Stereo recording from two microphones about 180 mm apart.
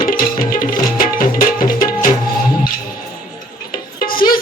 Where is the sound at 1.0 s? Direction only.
50° left (ahead or behind).